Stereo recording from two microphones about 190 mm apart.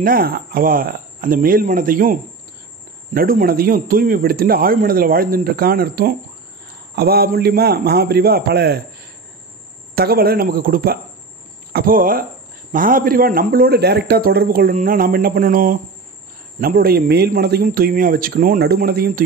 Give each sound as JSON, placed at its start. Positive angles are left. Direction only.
{"t": 0.0, "sound": "a man's voice", "side_deg": -50}
{"t": 9.9, "sound": "a man's voice", "side_deg": -55}